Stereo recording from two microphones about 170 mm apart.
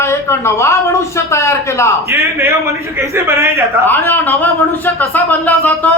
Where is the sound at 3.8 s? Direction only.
10° left (ahead or behind).